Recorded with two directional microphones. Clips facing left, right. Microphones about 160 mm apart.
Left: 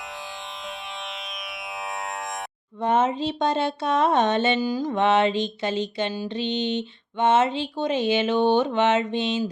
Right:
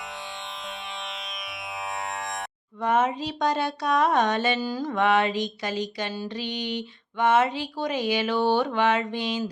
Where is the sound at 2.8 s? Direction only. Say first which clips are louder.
Left 2 dB; 25° left (ahead or behind).